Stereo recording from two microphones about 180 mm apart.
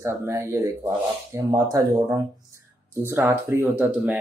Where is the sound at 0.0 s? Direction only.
15° right (ahead or behind).